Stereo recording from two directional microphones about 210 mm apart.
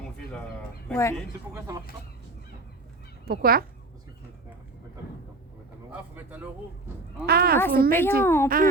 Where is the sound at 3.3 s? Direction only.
45° right (ahead or behind).